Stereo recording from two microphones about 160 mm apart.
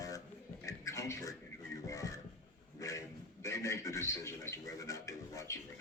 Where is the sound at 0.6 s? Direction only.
20° left (ahead or behind).